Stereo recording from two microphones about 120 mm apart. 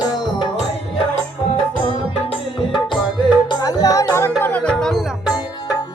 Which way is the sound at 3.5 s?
35° left (ahead or behind).